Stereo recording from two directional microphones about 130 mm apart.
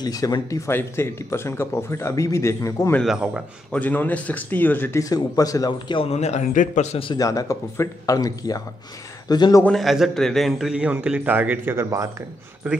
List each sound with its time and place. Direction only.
0.0 s speech: 30° left (ahead or behind)
3.1 s a man's voice: 5° right (ahead or behind)
3.7 s speech: 10° left (ahead or behind); by 6.0 s 35° left (ahead or behind)
6.0 s a man's voice: 60° left (ahead or behind)
7.2 s a man's voice: 25° left (ahead or behind)
9.7 s a man's voice: centre (ahead or behind); by 12.1 s 20° right (ahead or behind)